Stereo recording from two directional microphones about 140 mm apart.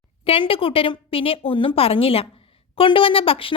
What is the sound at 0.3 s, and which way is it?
A woman's voice, 40° left (ahead or behind).